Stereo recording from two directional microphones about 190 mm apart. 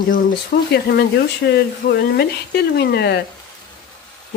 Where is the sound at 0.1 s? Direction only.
50° left (ahead or behind).